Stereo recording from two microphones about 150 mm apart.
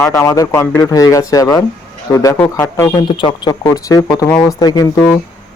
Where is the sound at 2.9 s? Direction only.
35° left (ahead or behind).